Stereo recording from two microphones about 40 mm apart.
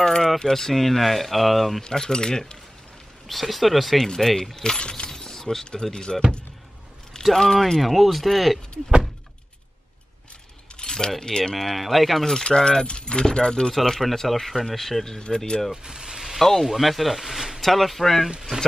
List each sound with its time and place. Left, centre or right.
0.0 s keys jangling: centre
0.5 s speech: centre
1.9 s speech: centre
3.3 s speech: centre
4.7 s speech: left
5.1 s speech: centre
7.3 s speech: centre
10.8 s speech: centre
11.5 s speech: centre
12.4 s speech: centre
13.7 s speech: centre
15.1 s speech: centre
15.7 s vehicle: centre
16.3 s speech: centre